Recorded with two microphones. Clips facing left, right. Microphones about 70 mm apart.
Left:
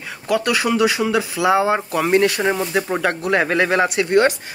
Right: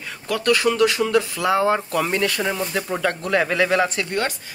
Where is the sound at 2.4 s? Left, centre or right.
Left.